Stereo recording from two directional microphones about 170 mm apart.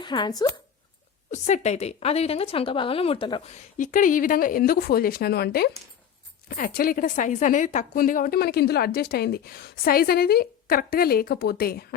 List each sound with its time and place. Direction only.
0.0 s speech: 25° left (ahead or behind)
1.3 s a woman's voice: 40° left (ahead or behind); by 11.9 s 65° left (ahead or behind)